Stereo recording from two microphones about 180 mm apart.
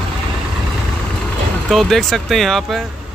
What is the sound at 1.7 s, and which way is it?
Speech, centre (ahead or behind).